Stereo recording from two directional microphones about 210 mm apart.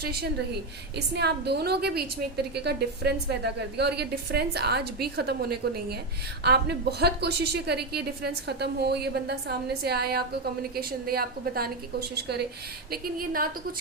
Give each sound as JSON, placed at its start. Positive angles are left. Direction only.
{"t": 0.0, "sound": "a woman's voice", "side_deg": -50}